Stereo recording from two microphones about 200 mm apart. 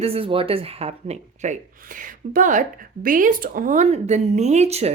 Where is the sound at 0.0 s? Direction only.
30° right (ahead or behind).